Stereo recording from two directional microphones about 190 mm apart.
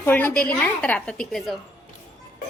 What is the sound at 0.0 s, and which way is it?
A woman's voice, 10° left (ahead or behind).